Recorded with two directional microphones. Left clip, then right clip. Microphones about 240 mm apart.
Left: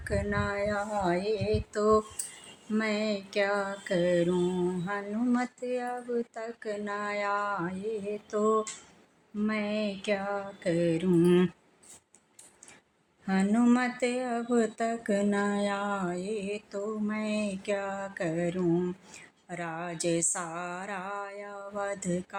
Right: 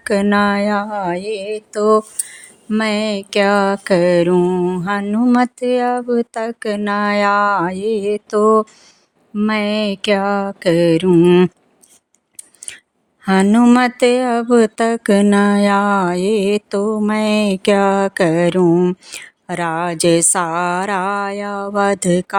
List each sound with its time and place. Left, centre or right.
0.0 s a sound: right
2.6 s mantra: right
13.2 s mantra: right